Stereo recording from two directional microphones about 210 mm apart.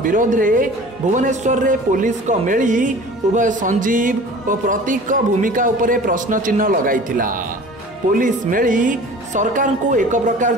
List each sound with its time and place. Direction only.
0.0 s music: 40° right (ahead or behind)